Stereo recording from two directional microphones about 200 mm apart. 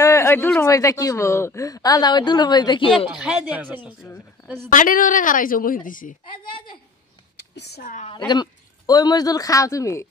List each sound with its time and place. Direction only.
0.0 s speech: 15° left (ahead or behind)
3.1 s speech: 5° right (ahead or behind)
4.0 s speech: 10° left (ahead or behind)
4.6 s a woman's voice: 45° left (ahead or behind)
7.3 s speech: 55° left (ahead or behind)
8.3 s speech: 20° left (ahead or behind)